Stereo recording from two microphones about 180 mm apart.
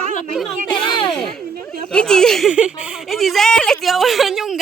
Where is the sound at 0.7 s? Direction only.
25° left (ahead or behind).